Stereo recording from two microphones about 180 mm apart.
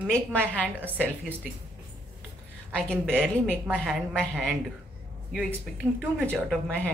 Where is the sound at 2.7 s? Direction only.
5° left (ahead or behind).